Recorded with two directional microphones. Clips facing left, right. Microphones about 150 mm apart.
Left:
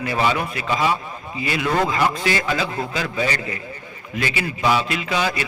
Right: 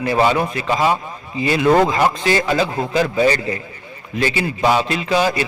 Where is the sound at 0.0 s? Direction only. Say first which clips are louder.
Right 5 dB; 35° right (ahead or behind).